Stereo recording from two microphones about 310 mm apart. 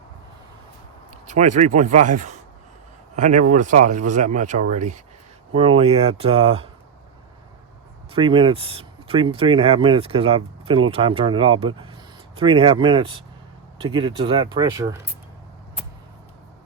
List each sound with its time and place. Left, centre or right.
1.3 s speech: right
8.1 s speech: centre